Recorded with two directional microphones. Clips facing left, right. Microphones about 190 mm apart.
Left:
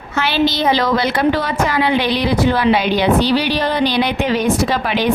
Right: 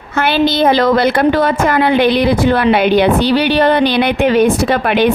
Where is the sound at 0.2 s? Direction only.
55° right (ahead or behind).